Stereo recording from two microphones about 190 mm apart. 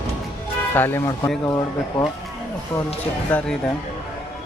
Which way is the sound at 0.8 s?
10° left (ahead or behind).